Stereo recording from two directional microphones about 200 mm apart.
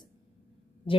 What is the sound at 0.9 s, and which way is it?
Speech, 25° left (ahead or behind).